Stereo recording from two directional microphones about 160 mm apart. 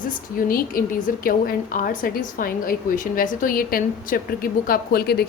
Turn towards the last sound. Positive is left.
turn(degrees=75)  # may be behind; listen again after turning